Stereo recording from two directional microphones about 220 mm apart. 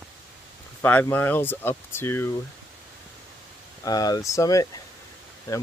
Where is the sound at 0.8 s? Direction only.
10° left (ahead or behind).